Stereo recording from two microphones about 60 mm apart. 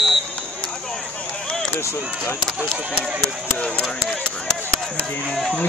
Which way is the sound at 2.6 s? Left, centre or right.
Centre.